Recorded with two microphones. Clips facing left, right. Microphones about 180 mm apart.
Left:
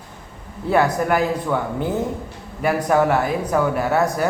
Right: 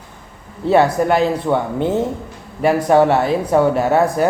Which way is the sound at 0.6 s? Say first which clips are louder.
Right 4 dB; 25° right (ahead or behind).